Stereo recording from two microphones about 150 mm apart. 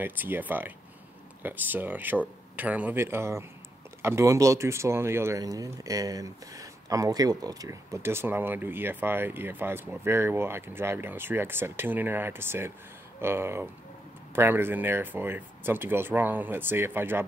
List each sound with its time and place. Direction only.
0.0 s speech: 15° right (ahead or behind)